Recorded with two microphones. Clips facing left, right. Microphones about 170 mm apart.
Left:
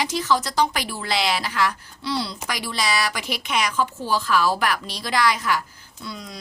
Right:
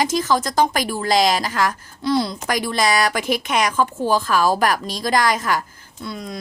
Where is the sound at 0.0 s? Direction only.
45° right (ahead or behind).